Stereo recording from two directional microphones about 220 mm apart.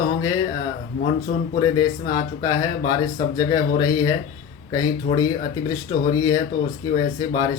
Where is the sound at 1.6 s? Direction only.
15° left (ahead or behind).